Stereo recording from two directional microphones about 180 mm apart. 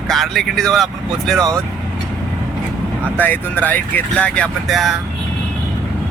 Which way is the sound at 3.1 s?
10° left (ahead or behind).